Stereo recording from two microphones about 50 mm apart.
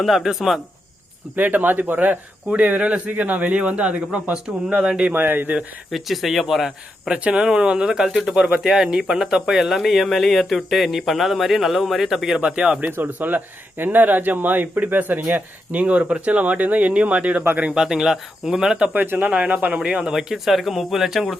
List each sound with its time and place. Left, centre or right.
0.0 s speech: centre
1.4 s speech: right
5.1 s speech: right
5.9 s speech: centre
7.1 s speech: centre
12.4 s speech: right
13.0 s speech: right
17.7 s speech: centre
18.9 s speech: right
19.8 s speech: centre
20.1 s speech: centre